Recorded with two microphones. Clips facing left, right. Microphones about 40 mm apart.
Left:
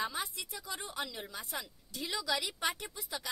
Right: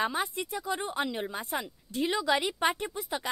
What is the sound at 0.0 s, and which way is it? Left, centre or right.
Speech, right.